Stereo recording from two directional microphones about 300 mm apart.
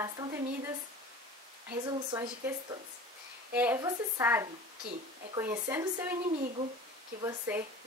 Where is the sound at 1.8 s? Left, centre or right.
Centre.